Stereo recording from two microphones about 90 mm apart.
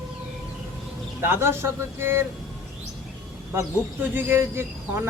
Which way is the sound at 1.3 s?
30° right (ahead or behind).